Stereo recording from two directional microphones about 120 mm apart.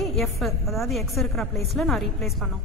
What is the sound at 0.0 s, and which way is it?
A woman's voice, centre (ahead or behind).